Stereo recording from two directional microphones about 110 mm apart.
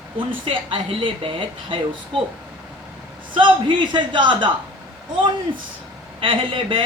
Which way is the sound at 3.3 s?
45° right (ahead or behind).